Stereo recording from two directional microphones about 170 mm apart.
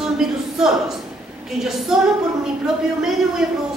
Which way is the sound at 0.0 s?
5° right (ahead or behind).